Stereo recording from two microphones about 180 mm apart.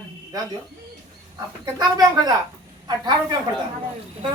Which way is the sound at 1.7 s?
15° right (ahead or behind).